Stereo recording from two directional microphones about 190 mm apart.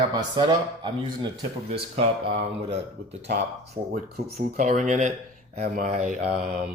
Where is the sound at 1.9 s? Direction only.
35° right (ahead or behind).